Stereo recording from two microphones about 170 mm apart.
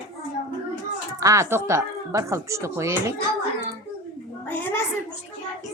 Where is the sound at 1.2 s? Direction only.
20° right (ahead or behind).